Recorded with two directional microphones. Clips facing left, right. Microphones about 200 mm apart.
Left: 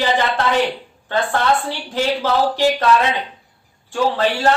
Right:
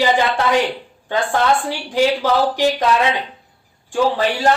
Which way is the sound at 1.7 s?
15° right (ahead or behind).